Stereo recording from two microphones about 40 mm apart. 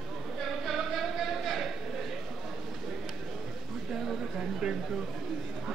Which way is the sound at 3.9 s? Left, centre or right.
Centre.